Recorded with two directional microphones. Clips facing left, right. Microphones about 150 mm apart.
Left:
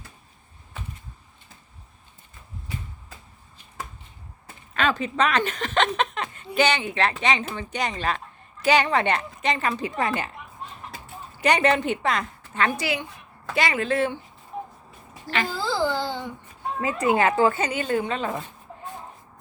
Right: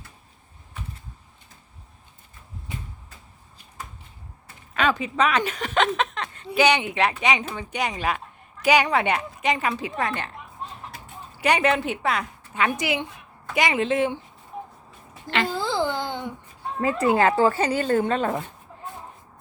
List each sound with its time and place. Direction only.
4.7 s a woman's voice: 10° right (ahead or behind); by 6.6 s 5° left (ahead or behind)
6.6 s speech: 15° right (ahead or behind); by 10.2 s 5° left (ahead or behind)
11.0 s a woman's voice: 5° right (ahead or behind)
15.3 s a sound: 25° right (ahead or behind)
16.8 s speech: 30° right (ahead or behind)